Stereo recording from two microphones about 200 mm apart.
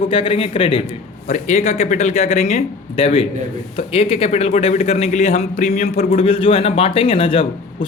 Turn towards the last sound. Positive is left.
turn(degrees=25)  # may be behind; listen again after turning